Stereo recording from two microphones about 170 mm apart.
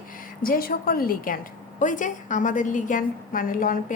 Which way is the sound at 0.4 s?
60° left (ahead or behind).